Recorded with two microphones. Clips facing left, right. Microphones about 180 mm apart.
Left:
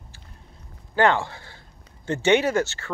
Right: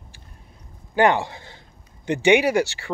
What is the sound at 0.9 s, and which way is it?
Speech, 15° right (ahead or behind).